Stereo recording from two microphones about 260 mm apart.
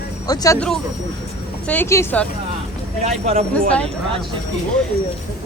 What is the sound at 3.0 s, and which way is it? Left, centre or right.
Speech, right.